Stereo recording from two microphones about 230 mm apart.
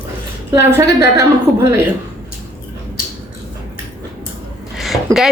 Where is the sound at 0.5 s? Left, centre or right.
Centre.